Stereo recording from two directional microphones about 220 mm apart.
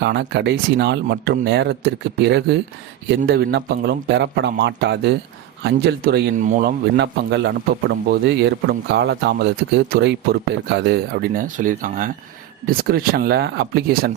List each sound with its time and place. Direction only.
0.0 s a man's voice: 50° right (ahead or behind)